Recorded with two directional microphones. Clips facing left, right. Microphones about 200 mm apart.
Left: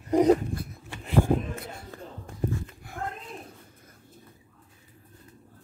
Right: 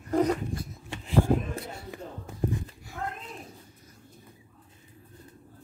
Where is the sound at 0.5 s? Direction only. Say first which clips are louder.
Even; 60° left (ahead or behind).